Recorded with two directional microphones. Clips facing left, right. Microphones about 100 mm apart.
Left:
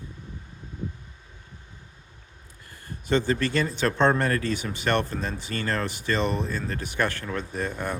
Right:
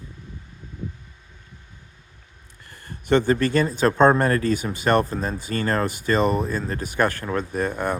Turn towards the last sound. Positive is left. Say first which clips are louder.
# right 5 dB
turn(degrees=-50)  # may be behind; listen again after turning